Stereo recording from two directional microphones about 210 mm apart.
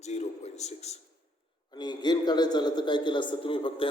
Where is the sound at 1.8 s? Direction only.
20° left (ahead or behind).